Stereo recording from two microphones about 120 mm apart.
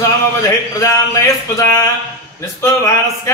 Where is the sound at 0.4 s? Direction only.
25° left (ahead or behind).